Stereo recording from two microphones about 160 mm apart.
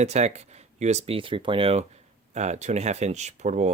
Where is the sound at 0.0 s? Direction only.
45° right (ahead or behind).